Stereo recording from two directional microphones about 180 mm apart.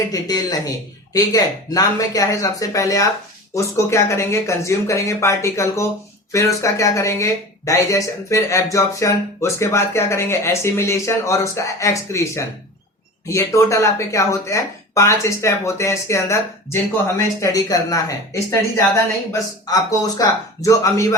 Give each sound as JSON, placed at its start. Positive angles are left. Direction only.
{"t": 0.1, "sound": "speech", "side_deg": 20}
{"t": 19.3, "sound": "speech", "side_deg": 20}